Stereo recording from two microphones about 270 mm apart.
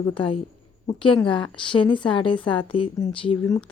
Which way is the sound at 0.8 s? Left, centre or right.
Centre.